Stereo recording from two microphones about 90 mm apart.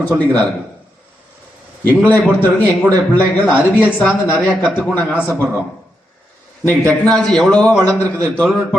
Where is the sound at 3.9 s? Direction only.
15° left (ahead or behind).